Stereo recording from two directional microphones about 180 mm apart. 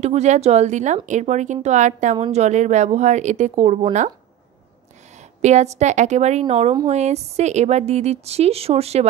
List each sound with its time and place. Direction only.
0.0 s speech: 40° right (ahead or behind)
5.4 s speech: 40° right (ahead or behind)